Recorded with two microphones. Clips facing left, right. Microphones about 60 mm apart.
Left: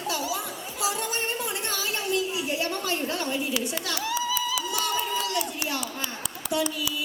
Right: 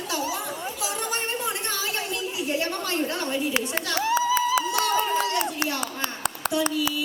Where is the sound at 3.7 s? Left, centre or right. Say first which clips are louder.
Right 5 dB; right.